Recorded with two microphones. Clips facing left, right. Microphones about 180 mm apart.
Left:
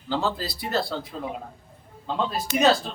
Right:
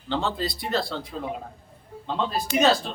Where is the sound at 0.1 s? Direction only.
5° left (ahead or behind).